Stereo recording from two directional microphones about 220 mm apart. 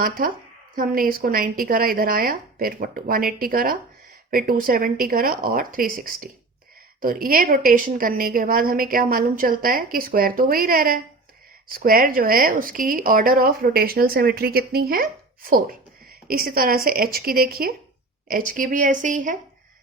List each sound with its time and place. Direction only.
0.0 s speech: 40° right (ahead or behind)